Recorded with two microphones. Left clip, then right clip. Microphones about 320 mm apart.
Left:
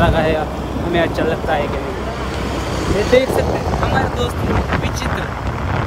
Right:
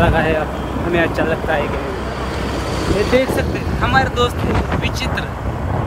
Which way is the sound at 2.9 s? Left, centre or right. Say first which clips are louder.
Left 2 dB; left.